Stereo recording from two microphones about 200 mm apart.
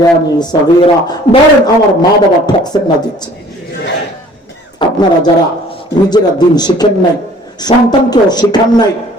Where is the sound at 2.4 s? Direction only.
20° left (ahead or behind).